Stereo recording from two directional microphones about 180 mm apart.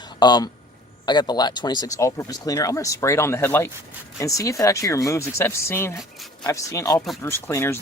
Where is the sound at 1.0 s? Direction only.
25° left (ahead or behind).